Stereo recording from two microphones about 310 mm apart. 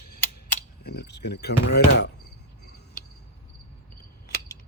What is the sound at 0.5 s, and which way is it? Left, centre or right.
Speech, left.